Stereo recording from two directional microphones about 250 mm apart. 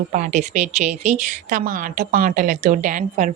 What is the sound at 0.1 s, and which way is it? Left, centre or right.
Speech, right.